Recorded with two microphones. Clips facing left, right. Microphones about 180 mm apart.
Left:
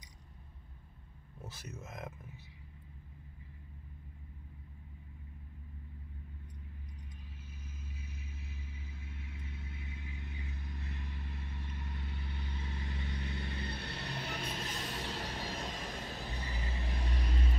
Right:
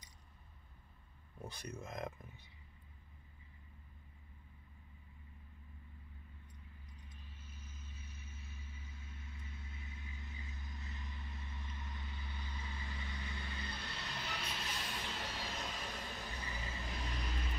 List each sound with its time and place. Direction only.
1.4 s speech: 5° left (ahead or behind)
7.9 s vehicle: 65° left (ahead or behind)
14.4 s vehicle: 40° left (ahead or behind)